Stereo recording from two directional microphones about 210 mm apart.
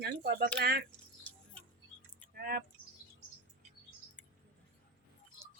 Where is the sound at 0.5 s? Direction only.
50° right (ahead or behind).